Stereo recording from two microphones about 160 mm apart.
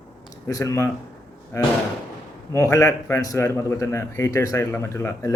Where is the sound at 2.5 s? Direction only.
20° left (ahead or behind).